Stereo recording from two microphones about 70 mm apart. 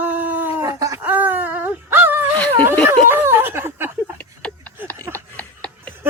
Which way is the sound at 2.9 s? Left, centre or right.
Right.